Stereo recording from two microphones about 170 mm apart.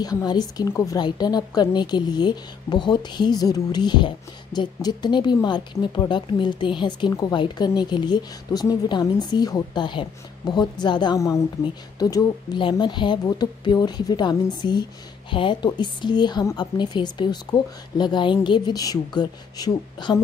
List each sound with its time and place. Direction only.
0.0 s a woman's voice: 25° left (ahead or behind)